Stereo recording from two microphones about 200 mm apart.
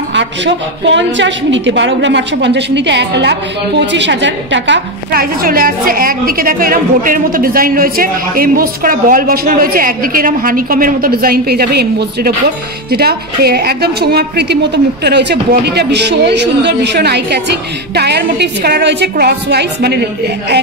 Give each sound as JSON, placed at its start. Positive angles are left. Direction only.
{"t": 0.8, "sound": "a woman's voice", "side_deg": -65}